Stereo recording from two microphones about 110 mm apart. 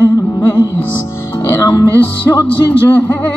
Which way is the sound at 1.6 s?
30° left (ahead or behind).